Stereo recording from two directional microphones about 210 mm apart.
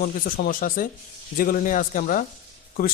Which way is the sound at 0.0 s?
40° left (ahead or behind).